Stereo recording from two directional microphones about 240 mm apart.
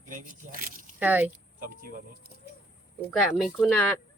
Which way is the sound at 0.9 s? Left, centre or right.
Centre.